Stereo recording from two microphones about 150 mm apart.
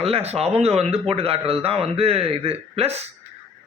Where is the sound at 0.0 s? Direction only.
40° right (ahead or behind).